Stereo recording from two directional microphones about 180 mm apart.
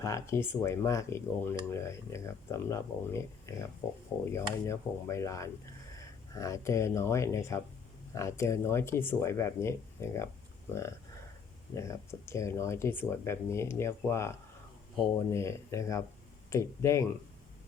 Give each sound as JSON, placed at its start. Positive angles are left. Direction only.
{"t": 0.0, "sound": "speech", "side_deg": 15}